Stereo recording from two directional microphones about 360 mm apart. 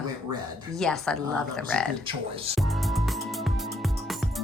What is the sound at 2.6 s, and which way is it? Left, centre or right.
Music, centre.